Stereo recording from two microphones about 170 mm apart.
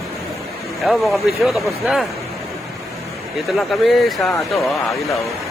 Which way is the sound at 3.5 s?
Centre (ahead or behind).